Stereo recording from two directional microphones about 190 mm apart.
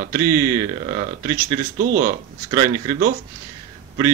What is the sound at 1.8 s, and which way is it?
Speech, 50° right (ahead or behind).